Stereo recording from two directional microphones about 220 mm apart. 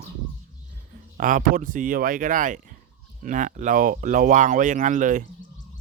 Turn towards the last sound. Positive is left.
turn(degrees=-35)  # may be behind; listen again after turning